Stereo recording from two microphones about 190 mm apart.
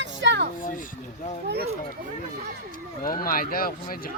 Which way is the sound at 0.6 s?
45° left (ahead or behind).